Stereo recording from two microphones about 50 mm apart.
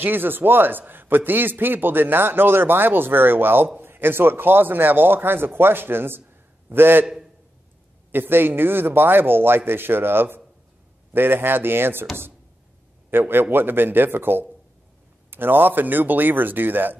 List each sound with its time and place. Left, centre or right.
0.0 s a man's voice: right
8.1 s a man's voice: right
13.1 s a man's voice: right